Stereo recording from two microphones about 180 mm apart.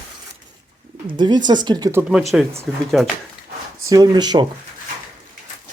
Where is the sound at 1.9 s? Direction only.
10° right (ahead or behind).